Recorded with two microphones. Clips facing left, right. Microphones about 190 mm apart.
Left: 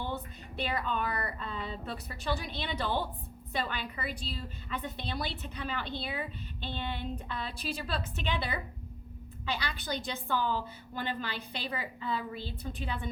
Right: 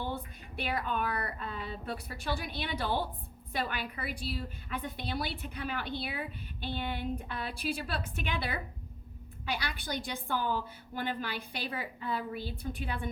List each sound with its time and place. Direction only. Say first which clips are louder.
0.1 s a woman's voice: left 1 dB; 10° right (ahead or behind)